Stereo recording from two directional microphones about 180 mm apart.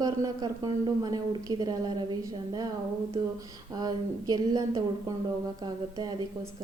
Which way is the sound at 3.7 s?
20° right (ahead or behind).